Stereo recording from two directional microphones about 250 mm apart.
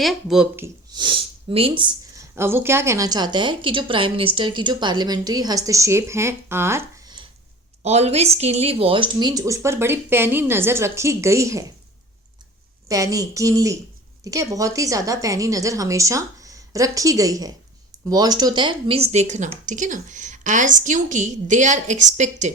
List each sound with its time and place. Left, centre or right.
0.0 s speech: centre
7.8 s speech: right
12.9 s a woman's voice: centre; by 22.5 s right